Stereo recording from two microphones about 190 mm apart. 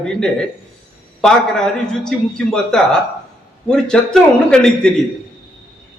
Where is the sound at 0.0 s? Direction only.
5° left (ahead or behind).